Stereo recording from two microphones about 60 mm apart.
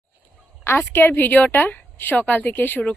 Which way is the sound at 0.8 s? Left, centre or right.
Left.